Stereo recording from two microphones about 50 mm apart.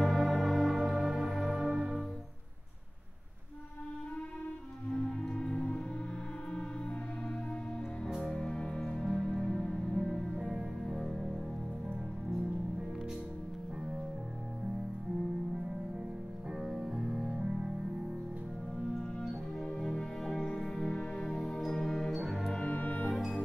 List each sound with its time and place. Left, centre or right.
0.0 s music: centre
1.7 s music: right
4.9 s music: centre
8.3 s music: centre
10.3 s music: centre
16.5 s cello: centre
17.4 s music: centre
19.1 s music: centre
21.5 s music: centre
22.7 s music: left
23.0 s music: centre